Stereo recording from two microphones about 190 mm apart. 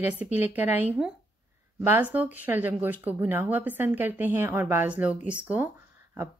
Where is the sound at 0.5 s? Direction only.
10° right (ahead or behind).